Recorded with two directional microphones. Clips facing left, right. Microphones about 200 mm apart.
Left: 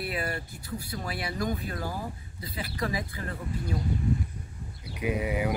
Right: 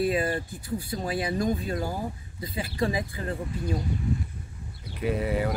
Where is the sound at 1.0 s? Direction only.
25° right (ahead or behind).